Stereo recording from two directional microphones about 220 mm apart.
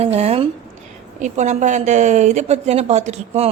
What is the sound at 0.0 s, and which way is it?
A woman's voice, 30° right (ahead or behind).